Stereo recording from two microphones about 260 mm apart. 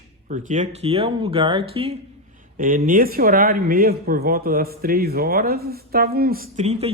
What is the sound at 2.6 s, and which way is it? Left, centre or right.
Speech, right.